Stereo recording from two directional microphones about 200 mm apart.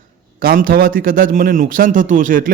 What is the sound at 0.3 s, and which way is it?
A man's voice, 45° right (ahead or behind).